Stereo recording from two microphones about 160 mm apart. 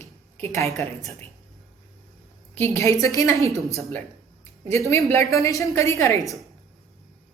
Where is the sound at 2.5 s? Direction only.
15° left (ahead or behind).